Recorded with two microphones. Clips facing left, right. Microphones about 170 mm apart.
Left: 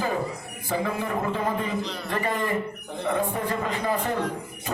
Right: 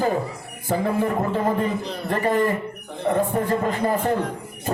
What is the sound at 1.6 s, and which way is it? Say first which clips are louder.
A man's voice: right 4 dB; 45° right (ahead or behind).